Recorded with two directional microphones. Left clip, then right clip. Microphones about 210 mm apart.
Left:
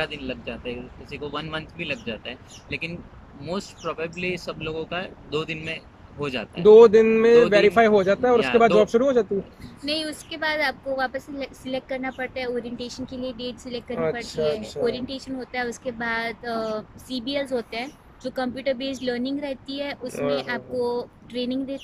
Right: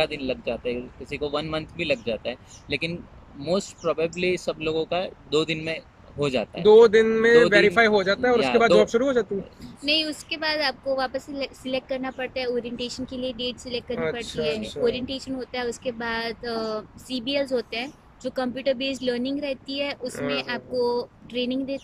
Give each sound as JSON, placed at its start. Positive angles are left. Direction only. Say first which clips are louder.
{"t": 0.0, "sound": "speech", "louder": "right 4 dB", "side_deg": -15}
{"t": 6.6, "sound": "speech", "louder": "left 3 dB", "side_deg": 5}